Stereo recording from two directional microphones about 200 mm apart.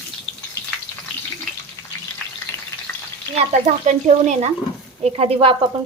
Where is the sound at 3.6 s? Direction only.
35° right (ahead or behind).